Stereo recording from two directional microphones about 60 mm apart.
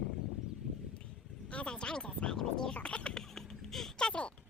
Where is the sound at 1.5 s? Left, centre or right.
Centre.